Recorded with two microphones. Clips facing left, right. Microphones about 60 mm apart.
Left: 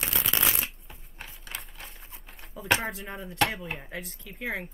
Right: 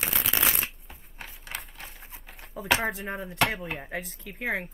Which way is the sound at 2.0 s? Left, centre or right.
Centre.